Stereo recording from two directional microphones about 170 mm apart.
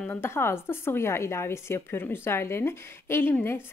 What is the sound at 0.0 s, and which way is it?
A woman's voice, 10° left (ahead or behind).